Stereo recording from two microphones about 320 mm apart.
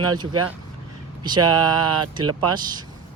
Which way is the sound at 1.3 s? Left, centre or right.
Centre.